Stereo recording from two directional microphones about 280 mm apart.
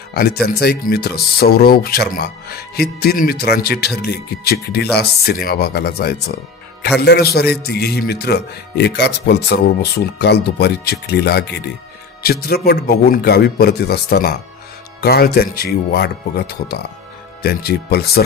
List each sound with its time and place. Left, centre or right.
0.1 s speech: left